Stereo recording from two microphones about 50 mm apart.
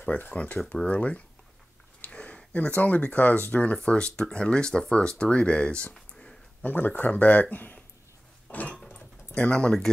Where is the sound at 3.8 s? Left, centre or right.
Centre.